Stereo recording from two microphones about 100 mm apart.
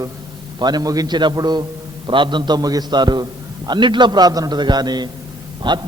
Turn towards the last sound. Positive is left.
turn(degrees=-50)  # may be behind; listen again after turning